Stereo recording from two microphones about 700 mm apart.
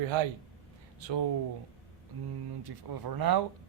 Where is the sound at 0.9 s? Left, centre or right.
Right.